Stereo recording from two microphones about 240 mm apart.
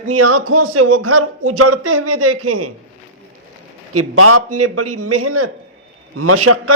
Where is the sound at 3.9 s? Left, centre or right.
Right.